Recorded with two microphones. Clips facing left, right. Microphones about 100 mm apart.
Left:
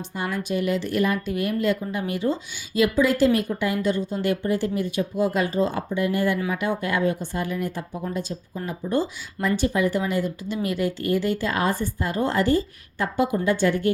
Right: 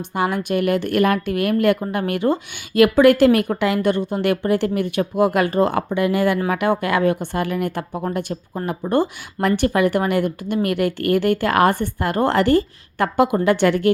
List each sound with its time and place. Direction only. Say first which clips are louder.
0.0 s speech: right 7 dB; 65° right (ahead or behind); by 6.4 s 90° right
6.5 s speech: right 6 dB; 75° right (ahead or behind)